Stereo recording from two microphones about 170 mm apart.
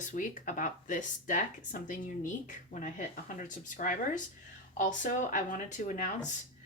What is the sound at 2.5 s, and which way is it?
Speech, 45° left (ahead or behind).